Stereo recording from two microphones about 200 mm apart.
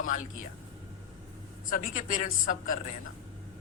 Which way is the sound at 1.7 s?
40° left (ahead or behind).